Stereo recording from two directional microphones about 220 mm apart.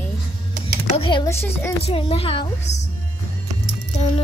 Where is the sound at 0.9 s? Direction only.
20° left (ahead or behind).